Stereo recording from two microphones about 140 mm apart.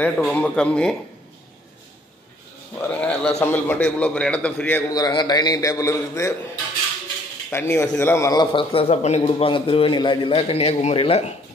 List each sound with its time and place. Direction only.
0.0 s a man's voice: 10° left (ahead or behind)
2.9 s a man's voice: 10° left (ahead or behind)
4.8 s a man's voice: 25° left (ahead or behind)
7.5 s a man's voice: 15° left (ahead or behind); by 10.3 s 30° left (ahead or behind)
10.3 s speech: 45° left (ahead or behind)